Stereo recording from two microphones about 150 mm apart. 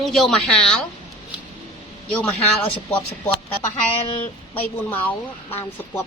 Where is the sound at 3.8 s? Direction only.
35° left (ahead or behind).